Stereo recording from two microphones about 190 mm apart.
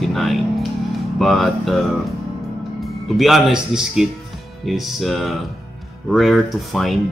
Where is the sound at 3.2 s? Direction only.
Centre (ahead or behind).